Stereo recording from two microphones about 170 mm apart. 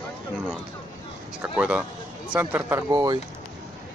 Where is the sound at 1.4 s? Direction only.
5° right (ahead or behind).